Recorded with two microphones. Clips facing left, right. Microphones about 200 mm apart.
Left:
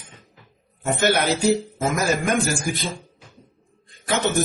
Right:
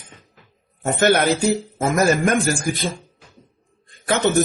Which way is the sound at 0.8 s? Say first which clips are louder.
Right 4 dB; 50° right (ahead or behind).